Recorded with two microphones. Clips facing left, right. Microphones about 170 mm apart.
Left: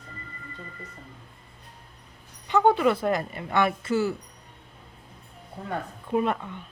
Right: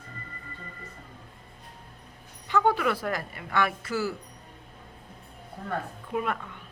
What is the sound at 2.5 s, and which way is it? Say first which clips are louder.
A woman's voice: left 4 dB; 25° left (ahead or behind).